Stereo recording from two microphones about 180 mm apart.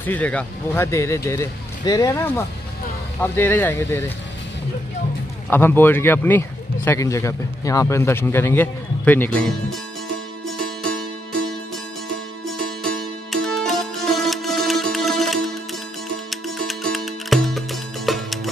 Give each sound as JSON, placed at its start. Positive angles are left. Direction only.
{"t": 0.0, "sound": "speech", "side_deg": 10}
{"t": 5.5, "sound": "speech", "side_deg": 10}
{"t": 10.4, "sound": "music", "side_deg": 0}
{"t": 12.1, "sound": "music", "side_deg": 5}